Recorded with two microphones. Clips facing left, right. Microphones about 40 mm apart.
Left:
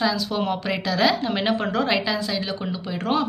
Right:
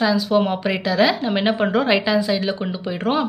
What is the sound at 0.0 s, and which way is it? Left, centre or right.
A woman's voice, centre.